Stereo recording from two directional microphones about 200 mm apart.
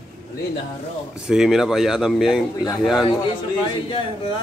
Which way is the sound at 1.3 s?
Centre (ahead or behind).